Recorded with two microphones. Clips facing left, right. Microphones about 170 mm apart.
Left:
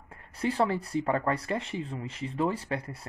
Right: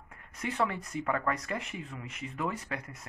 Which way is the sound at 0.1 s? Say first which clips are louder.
Left 7 dB; 30° left (ahead or behind).